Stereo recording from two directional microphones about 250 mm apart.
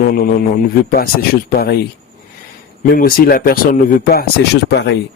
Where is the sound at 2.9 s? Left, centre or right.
Left.